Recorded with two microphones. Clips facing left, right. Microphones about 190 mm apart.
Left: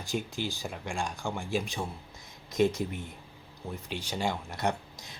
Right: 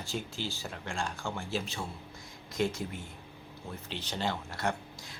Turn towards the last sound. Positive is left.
turn(degrees=20)  # may be behind; listen again after turning